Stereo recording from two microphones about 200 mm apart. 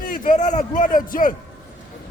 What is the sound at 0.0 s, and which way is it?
A man's voice, 40° left (ahead or behind).